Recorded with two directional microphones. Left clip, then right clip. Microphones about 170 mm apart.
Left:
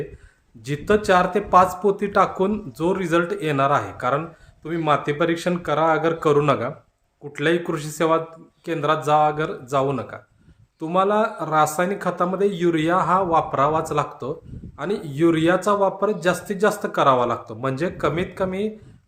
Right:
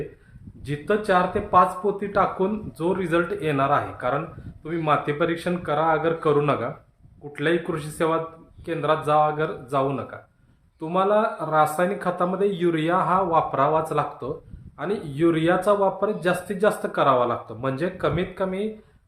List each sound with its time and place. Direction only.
0.6 s speech: 40° left (ahead or behind)